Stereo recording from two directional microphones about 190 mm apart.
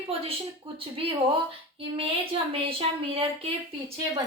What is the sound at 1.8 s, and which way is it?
Speech, 30° right (ahead or behind).